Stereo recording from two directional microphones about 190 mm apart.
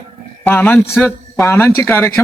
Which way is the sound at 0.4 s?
10° left (ahead or behind).